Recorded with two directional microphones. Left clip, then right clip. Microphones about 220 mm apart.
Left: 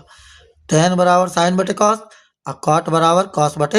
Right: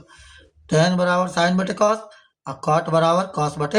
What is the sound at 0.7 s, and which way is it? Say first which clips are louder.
Speech: left 5 dB; 55° left (ahead or behind).